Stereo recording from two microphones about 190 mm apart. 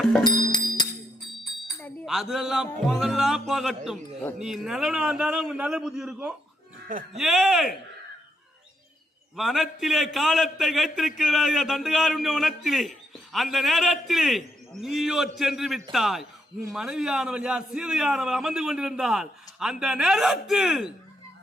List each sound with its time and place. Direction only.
0.0 s music: centre (ahead or behind)
0.3 s music: 25° left (ahead or behind)
2.0 s a man's voice: centre (ahead or behind)
6.8 s speech: 45° right (ahead or behind)
7.2 s a man's voice: centre (ahead or behind)
9.3 s a man's voice: centre (ahead or behind)